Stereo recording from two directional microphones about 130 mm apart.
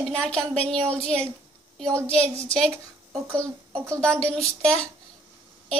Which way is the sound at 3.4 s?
20° right (ahead or behind).